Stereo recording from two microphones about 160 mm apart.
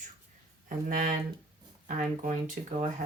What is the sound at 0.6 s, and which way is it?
Speech, 55° right (ahead or behind).